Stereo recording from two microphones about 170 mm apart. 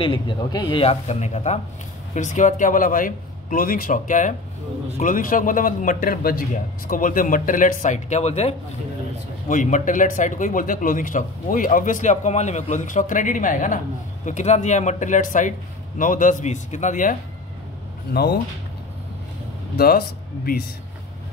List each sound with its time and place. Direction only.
0.0 s a man's voice: 30° left (ahead or behind); by 17.2 s 50° left (ahead or behind)
18.1 s speech: 70° left (ahead or behind)
19.8 s speech: 60° left (ahead or behind)